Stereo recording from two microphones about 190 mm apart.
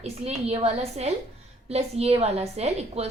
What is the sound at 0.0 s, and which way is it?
A woman's voice, 35° right (ahead or behind).